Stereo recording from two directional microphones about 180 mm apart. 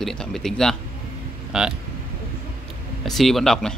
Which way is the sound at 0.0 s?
5° left (ahead or behind).